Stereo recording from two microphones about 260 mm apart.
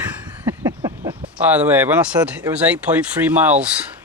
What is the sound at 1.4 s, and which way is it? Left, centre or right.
Speech, centre.